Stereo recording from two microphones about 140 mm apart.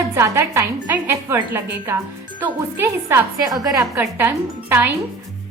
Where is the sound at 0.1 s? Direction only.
20° right (ahead or behind).